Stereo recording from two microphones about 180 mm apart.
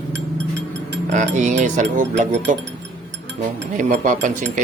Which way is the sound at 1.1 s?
45° right (ahead or behind).